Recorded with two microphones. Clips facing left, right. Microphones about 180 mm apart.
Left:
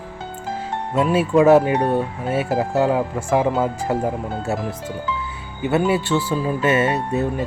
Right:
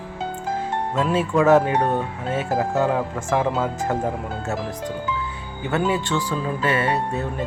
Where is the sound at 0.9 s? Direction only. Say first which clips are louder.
Left 5 dB; 10° left (ahead or behind).